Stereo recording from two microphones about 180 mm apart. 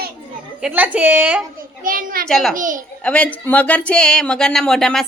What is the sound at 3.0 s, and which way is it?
A woman's voice, 5° left (ahead or behind).